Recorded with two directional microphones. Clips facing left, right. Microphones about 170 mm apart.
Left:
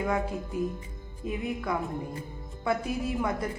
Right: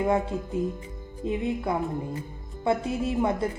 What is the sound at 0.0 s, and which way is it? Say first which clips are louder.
A woman's voice: right 4 dB; 25° right (ahead or behind).